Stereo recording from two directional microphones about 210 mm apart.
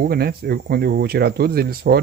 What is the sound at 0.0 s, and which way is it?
Speech, 45° right (ahead or behind).